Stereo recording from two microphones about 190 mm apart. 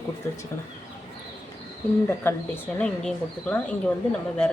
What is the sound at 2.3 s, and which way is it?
Speech, 10° left (ahead or behind).